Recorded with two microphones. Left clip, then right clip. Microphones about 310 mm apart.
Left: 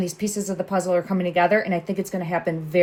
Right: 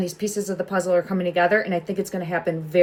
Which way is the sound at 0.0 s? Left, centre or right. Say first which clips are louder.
Right 1 dB; centre.